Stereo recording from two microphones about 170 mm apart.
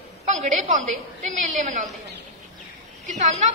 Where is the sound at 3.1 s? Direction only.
45° right (ahead or behind).